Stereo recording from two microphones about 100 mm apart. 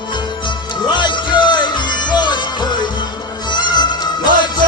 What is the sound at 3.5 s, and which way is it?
Music, 50° left (ahead or behind).